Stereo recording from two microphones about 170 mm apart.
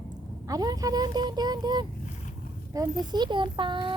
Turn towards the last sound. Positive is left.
turn(degrees=-30)  # may be behind; listen again after turning